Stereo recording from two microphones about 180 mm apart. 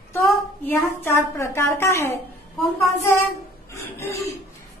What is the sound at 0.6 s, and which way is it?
A woman's voice, 15° left (ahead or behind).